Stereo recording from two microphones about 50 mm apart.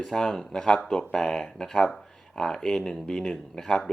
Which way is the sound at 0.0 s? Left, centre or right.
Centre.